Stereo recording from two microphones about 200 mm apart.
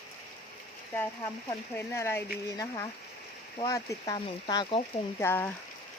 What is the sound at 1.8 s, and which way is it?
Speech, 10° left (ahead or behind).